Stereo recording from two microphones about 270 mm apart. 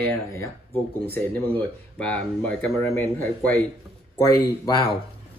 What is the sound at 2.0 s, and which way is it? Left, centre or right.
Speech, centre.